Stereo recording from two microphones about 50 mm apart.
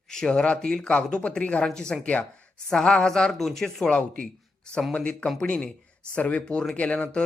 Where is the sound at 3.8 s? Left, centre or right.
Centre.